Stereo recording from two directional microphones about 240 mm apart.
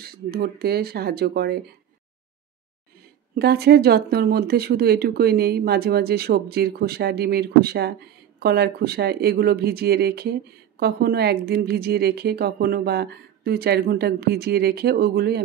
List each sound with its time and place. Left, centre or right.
0.0 s a woman's voice: right
3.3 s a woman's voice: right